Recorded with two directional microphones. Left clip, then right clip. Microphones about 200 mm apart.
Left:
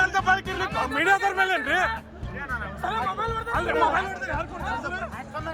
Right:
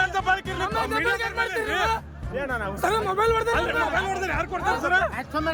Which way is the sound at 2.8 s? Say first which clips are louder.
Right 5 dB; 55° right (ahead or behind).